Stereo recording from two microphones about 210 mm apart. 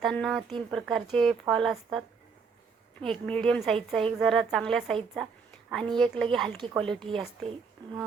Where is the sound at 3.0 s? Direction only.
5° left (ahead or behind).